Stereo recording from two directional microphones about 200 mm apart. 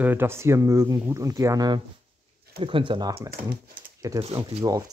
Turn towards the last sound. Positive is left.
turn(degrees=-20)  # may be behind; listen again after turning